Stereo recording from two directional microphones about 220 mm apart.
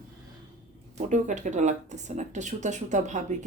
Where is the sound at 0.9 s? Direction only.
35° right (ahead or behind).